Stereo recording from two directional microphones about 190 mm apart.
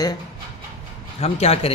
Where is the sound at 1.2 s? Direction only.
30° left (ahead or behind).